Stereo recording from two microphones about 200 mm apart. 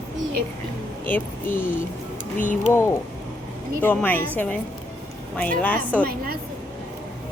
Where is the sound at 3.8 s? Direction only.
10° left (ahead or behind).